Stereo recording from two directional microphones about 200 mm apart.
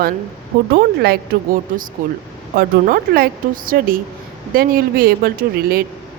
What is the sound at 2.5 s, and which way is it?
A woman's voice, 50° right (ahead or behind).